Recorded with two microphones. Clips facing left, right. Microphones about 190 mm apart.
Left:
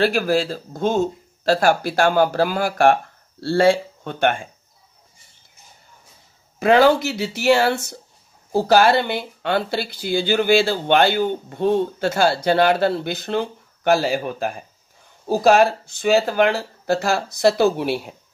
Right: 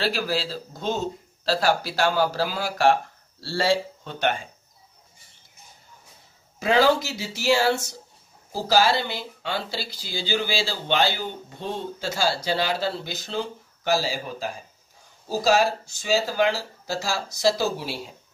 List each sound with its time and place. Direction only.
0.0 s speech: 50° left (ahead or behind)
6.6 s speech: 60° left (ahead or behind)